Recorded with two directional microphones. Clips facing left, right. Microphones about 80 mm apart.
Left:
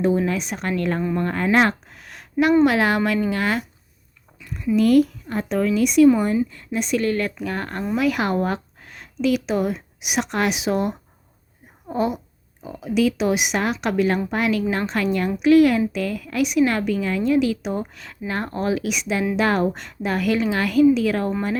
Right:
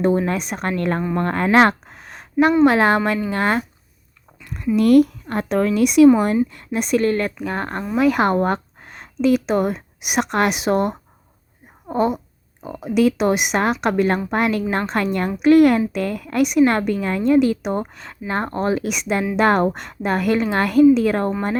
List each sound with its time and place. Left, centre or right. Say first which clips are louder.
0.3 s a woman's voice: right 2 dB; right
1.9 s a sound: right 3 dB; right
2.6 s speech: right 3 dB; right
4.8 s a woman's voice: right 3 dB; right
6.3 s a woman's voice: right 2 dB; right
11.9 s speech: right 3 dB; right
12.6 s a woman's voice: right 3 dB; right
17.9 s a woman's voice: right 3 dB; right